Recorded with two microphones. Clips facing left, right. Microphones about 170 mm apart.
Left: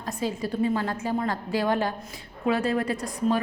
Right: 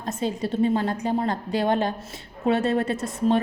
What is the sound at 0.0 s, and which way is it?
A woman's voice, 25° right (ahead or behind).